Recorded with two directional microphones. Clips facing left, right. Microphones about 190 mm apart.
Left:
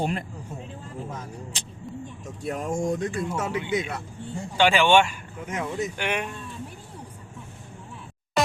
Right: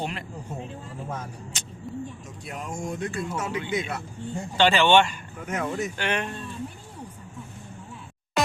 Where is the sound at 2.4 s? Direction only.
40° left (ahead or behind).